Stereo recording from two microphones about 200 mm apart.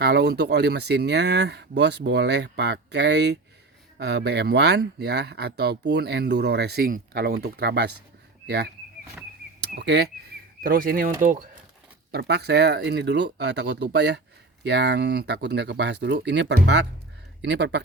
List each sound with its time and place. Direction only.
0.0 s speech: 55° right (ahead or behind)
9.6 s a sound: 55° right (ahead or behind)
11.2 s speech: 45° right (ahead or behind)
12.1 s speech: 55° right (ahead or behind)